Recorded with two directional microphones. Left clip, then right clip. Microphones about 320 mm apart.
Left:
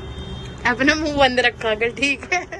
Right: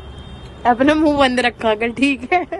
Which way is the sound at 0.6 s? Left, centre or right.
Centre.